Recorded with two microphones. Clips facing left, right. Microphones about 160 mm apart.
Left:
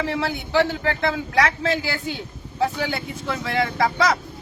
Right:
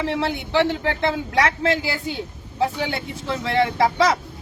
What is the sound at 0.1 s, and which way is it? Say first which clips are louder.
Speech: right 1 dB; 25° right (ahead or behind).